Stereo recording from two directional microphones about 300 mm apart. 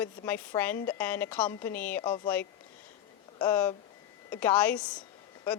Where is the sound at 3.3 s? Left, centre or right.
Centre.